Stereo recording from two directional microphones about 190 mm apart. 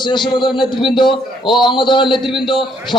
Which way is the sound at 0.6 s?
25° left (ahead or behind).